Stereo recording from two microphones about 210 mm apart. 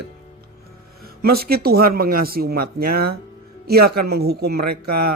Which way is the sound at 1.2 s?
45° right (ahead or behind).